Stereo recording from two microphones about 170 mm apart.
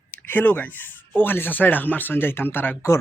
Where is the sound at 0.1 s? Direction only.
10° left (ahead or behind).